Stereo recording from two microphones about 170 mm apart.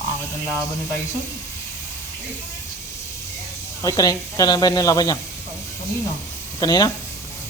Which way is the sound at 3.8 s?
20° left (ahead or behind).